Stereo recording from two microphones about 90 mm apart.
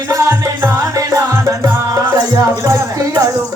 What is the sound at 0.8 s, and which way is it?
Music, 40° right (ahead or behind).